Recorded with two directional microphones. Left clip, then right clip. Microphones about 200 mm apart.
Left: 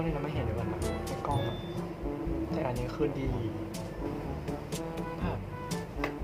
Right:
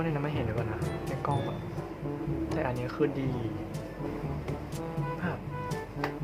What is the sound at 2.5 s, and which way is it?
Speech, 10° right (ahead or behind).